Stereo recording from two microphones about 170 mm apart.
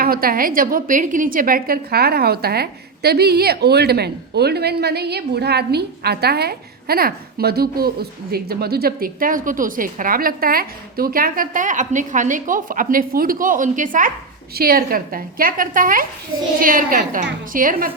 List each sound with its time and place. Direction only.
0.0 s a woman's voice: 60° right (ahead or behind)
14.5 s a woman's voice: 60° right (ahead or behind)